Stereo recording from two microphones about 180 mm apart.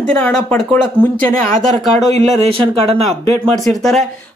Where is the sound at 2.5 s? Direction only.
30° right (ahead or behind).